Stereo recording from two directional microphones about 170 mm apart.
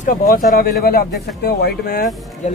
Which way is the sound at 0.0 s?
55° left (ahead or behind).